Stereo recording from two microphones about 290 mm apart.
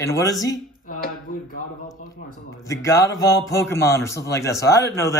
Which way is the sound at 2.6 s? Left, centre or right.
Centre.